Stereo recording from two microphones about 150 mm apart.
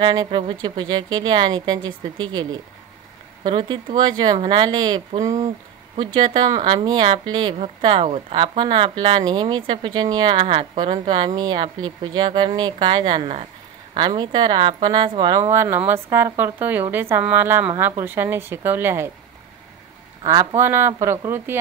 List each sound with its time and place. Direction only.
0.0 s speech: 30° right (ahead or behind)
15.5 s speech: 15° right (ahead or behind)
20.2 s speech: 20° right (ahead or behind)